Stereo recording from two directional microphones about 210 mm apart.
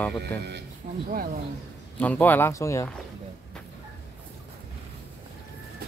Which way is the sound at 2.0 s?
10° left (ahead or behind).